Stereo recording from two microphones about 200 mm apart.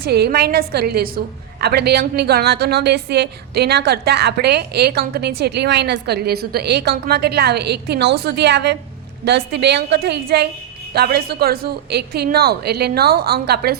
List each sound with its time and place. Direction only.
0.0 s a woman's voice: 50° right (ahead or behind)